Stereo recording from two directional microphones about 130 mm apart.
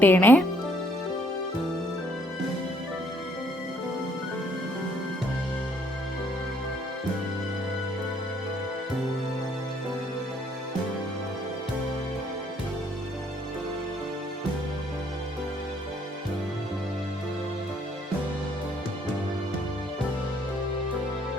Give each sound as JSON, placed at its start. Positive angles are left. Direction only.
{"t": 0.0, "sound": "speech", "side_deg": 15}